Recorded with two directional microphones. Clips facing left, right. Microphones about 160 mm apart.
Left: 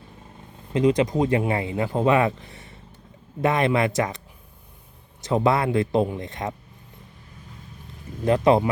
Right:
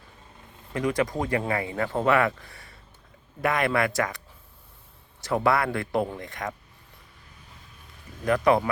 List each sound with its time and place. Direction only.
0.7 s speech: 20° left (ahead or behind)
5.2 s speech: 20° left (ahead or behind)
8.2 s speech: 25° left (ahead or behind)